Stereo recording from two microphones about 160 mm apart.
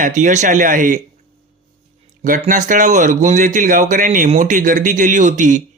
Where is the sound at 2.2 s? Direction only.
55° right (ahead or behind).